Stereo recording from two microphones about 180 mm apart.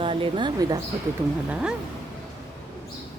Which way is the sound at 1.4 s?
5° right (ahead or behind).